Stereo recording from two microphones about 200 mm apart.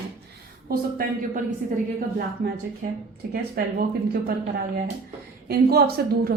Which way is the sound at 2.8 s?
45° right (ahead or behind).